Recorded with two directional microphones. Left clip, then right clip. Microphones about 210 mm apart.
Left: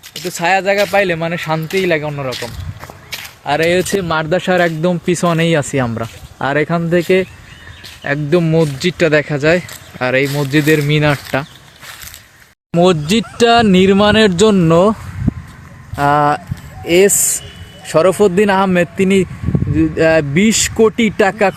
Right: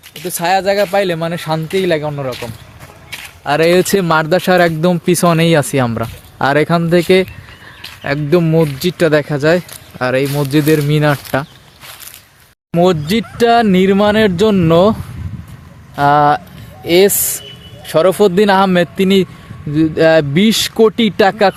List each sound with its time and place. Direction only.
0.3 s speech: 10° right (ahead or behind)
3.1 s a sound: 30° left (ahead or behind)
3.4 s speech: 35° right (ahead or behind); by 11.4 s 10° right (ahead or behind)
12.7 s speech: centre (ahead or behind)
16.0 s speech: centre (ahead or behind)